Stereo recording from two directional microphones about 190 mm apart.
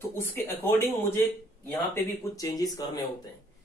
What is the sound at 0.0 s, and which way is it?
Speech, 10° left (ahead or behind).